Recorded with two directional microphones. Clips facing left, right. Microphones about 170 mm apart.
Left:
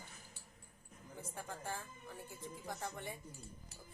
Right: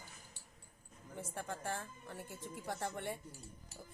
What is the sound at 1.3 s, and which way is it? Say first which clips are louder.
A woman's voice: right 3 dB; 65° right (ahead or behind).